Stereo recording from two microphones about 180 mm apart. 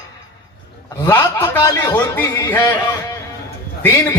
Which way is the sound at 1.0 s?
20° left (ahead or behind).